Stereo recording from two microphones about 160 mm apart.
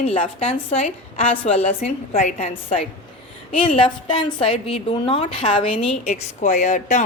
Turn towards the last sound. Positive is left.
turn(degrees=50)  # may be behind; listen again after turning